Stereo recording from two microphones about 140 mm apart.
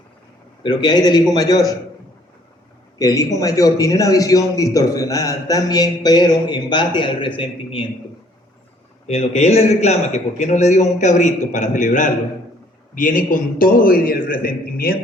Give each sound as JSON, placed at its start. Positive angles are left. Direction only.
{"t": 0.6, "sound": "a man's voice", "side_deg": 35}
{"t": 3.0, "sound": "a man's voice", "side_deg": 25}
{"t": 9.0, "sound": "a man's voice", "side_deg": 50}
{"t": 12.9, "sound": "a man's voice", "side_deg": 75}